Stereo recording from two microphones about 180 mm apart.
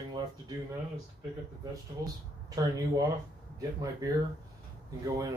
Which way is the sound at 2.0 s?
20° right (ahead or behind).